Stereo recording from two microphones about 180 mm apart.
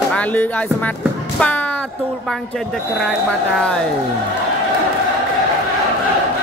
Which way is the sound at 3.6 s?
5° left (ahead or behind).